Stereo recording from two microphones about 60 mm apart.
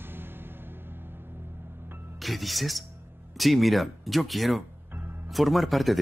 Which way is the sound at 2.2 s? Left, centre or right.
Centre.